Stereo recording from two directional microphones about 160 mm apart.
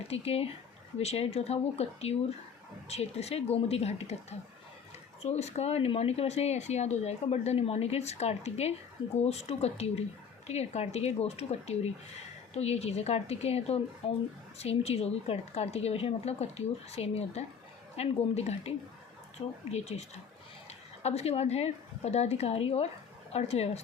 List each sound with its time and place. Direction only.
0.1 s speech: 40° left (ahead or behind)
19.7 s a woman's voice: 45° left (ahead or behind)